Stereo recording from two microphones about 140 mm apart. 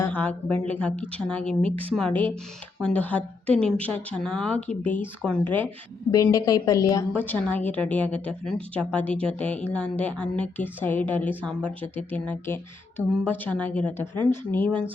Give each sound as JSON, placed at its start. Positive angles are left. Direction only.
{"t": 0.0, "sound": "a woman's voice", "side_deg": 10}
{"t": 6.3, "sound": "a woman's voice", "side_deg": 25}
{"t": 7.2, "sound": "a woman's voice", "side_deg": 10}